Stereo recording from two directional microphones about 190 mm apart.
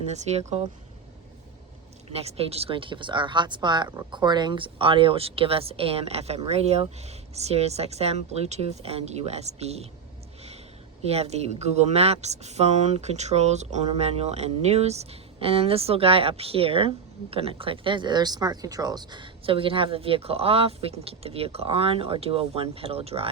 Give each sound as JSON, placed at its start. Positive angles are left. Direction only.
{"t": 0.1, "sound": "speech", "side_deg": -35}
{"t": 2.0, "sound": "speech", "side_deg": -35}
{"t": 11.0, "sound": "speech", "side_deg": -35}